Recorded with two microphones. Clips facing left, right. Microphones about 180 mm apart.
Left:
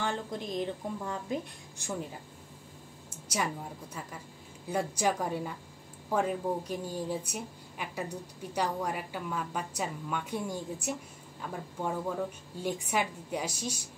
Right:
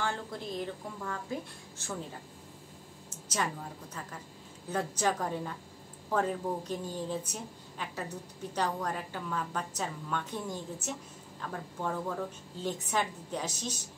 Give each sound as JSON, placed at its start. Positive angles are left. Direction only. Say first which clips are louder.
{"t": 0.0, "sound": "a woman's voice", "louder": "left 2 dB", "side_deg": 20}
{"t": 4.6, "sound": "a woman's voice", "louder": "left 1 dB", "side_deg": 10}